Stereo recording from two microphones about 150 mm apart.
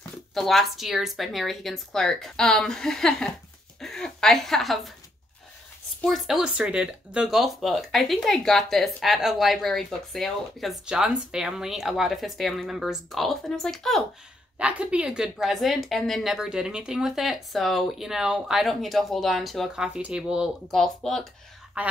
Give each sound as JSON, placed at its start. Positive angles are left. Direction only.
{"t": 0.3, "sound": "speech", "side_deg": 0}
{"t": 6.0, "sound": "speech", "side_deg": 0}
{"t": 14.6, "sound": "speech", "side_deg": -10}
{"t": 21.8, "sound": "speech", "side_deg": -10}